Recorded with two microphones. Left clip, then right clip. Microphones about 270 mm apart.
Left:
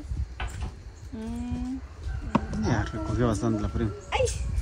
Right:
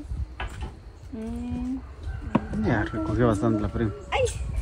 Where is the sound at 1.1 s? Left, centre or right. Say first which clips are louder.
Right 2 dB; centre.